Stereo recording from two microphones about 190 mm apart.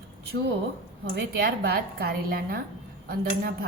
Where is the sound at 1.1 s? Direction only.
55° right (ahead or behind).